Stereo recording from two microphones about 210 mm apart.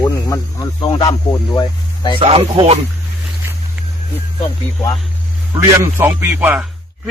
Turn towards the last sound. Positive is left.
turn(degrees=-10)  # may be behind; listen again after turning